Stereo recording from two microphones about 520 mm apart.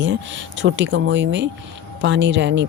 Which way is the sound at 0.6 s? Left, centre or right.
Right.